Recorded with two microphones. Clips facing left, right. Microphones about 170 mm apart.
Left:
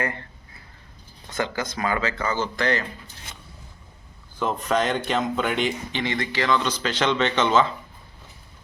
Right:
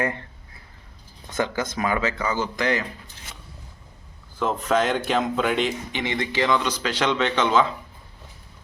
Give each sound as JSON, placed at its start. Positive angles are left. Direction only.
{"t": 1.3, "sound": "speech", "side_deg": -20}
{"t": 4.4, "sound": "speech", "side_deg": 0}
{"t": 5.9, "sound": "speech", "side_deg": -20}